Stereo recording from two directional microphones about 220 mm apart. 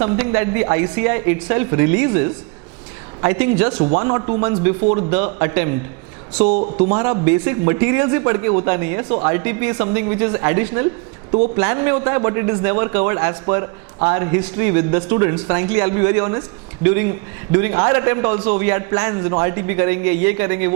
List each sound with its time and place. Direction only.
0.0 s a man's voice: 15° right (ahead or behind)
3.8 s a man's voice: 25° right (ahead or behind)
6.3 s speech: 30° right (ahead or behind)
6.9 s a man's voice: 20° right (ahead or behind)
18.6 s a man's voice: 15° right (ahead or behind)